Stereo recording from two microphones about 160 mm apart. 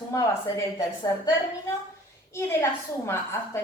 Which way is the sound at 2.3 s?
15° left (ahead or behind).